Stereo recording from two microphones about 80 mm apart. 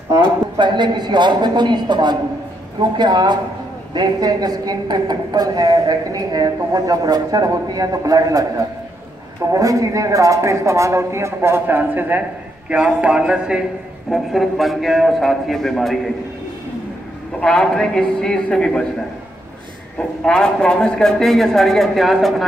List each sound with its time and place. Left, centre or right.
0.6 s a woman's voice: right
12.6 s a man's voice: centre
17.4 s a man's voice: centre
20.2 s a man's voice: centre